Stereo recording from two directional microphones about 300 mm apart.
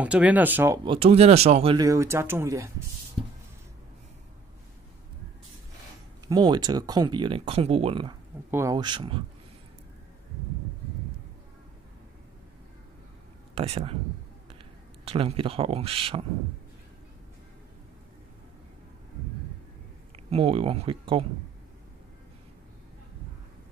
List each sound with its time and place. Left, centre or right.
0.0 s speech: centre
0.9 s speech: centre
6.2 s speech: centre
13.6 s speech: centre
15.0 s speech: centre
20.2 s speech: centre